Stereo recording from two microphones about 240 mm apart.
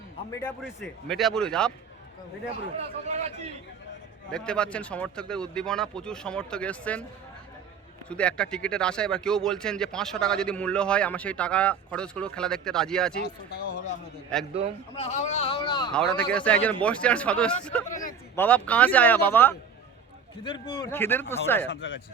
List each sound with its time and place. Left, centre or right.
0.3 s a man's voice: centre
0.6 s speech: centre
3.1 s a man's voice: right
4.3 s speech: centre
8.1 s speech: centre
13.7 s a sound: left
14.3 s speech: centre
14.9 s a man's voice: left
15.9 s a man's voice: centre
20.4 s a man's voice: left
21.7 s speech: left